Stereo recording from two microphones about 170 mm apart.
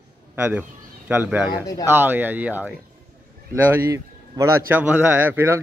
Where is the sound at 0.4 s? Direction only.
10° right (ahead or behind).